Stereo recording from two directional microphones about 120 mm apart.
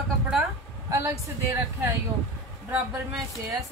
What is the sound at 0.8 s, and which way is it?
Speech, 25° right (ahead or behind).